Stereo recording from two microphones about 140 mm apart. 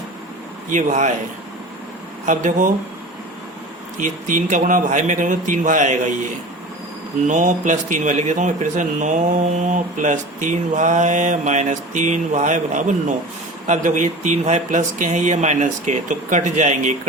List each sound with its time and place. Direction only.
0.7 s speech: 65° right (ahead or behind)
2.2 s speech: 65° right (ahead or behind)
3.9 s speech: 65° right (ahead or behind)
7.3 s speech: 65° right (ahead or behind)